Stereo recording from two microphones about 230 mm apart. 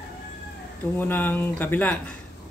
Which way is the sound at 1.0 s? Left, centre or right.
Centre.